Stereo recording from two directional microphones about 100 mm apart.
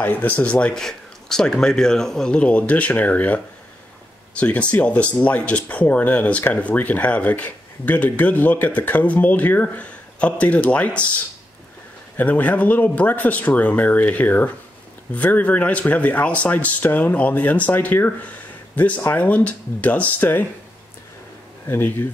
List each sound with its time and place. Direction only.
0.0 s speech: 20° left (ahead or behind)
12.2 s speech: 15° left (ahead or behind)
21.6 s speech: 25° left (ahead or behind)